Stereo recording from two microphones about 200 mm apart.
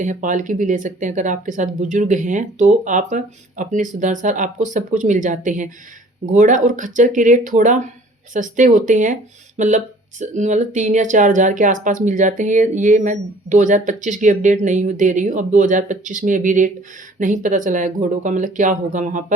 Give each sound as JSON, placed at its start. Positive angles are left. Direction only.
{"t": 0.0, "sound": "speech", "side_deg": -40}